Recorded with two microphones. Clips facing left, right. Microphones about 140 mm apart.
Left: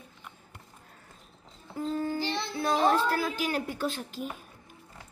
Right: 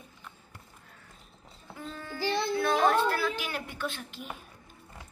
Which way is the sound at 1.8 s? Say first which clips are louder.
Left 11 dB; 35° left (ahead or behind).